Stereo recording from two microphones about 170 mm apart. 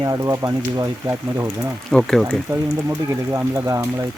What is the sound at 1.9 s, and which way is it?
Speech, centre (ahead or behind).